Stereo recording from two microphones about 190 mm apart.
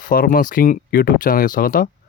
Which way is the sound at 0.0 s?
50° left (ahead or behind).